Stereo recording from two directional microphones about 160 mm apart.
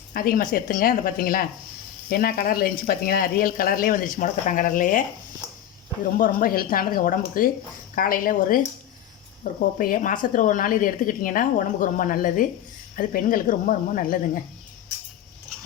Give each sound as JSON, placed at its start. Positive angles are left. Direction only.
{"t": 0.1, "sound": "a woman's voice", "side_deg": 65}
{"t": 6.1, "sound": "a woman's voice", "side_deg": 65}